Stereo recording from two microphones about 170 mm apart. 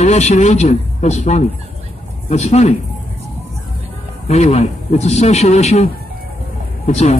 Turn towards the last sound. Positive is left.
turn(degrees=40)  # may be behind; listen again after turning